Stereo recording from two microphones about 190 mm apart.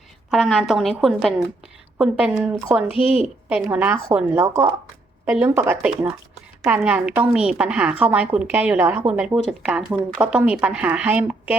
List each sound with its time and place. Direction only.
0.3 s a woman's voice: centre (ahead or behind)
2.9 s a woman's voice: 30° left (ahead or behind)
3.2 s a woman's voice: 10° right (ahead or behind)